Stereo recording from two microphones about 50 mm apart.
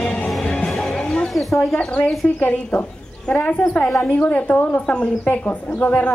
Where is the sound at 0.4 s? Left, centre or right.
Centre.